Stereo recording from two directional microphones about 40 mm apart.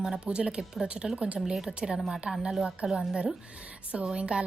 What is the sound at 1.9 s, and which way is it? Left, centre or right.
A woman's voice, centre.